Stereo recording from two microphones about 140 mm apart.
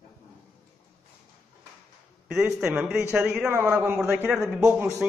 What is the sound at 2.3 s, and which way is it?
A man's voice, 5° right (ahead or behind).